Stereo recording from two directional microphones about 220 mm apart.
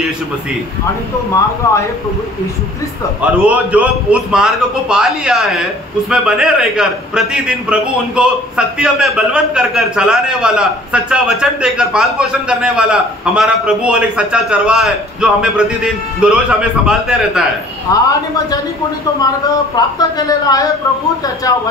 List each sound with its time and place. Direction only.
1.6 s speech: 10° left (ahead or behind)
3.4 s a man's voice: 5° right (ahead or behind)
17.9 s speech: 15° left (ahead or behind)
19.7 s speech: 15° left (ahead or behind)